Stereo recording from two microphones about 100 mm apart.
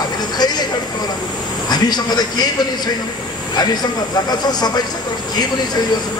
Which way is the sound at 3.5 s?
45° left (ahead or behind).